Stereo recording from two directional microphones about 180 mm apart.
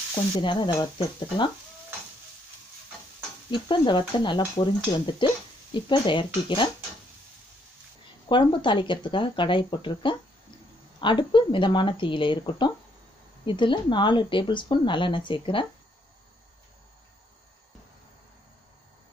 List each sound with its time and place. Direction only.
0.1 s speech: 25° left (ahead or behind)
3.4 s speech: 25° left (ahead or behind)
8.3 s speech: 25° left (ahead or behind)